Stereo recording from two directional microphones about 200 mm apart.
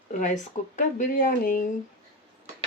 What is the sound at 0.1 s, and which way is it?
Speech, 40° left (ahead or behind).